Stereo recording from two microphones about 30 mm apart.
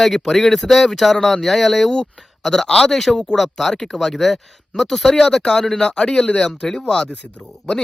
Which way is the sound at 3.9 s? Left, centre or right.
Centre.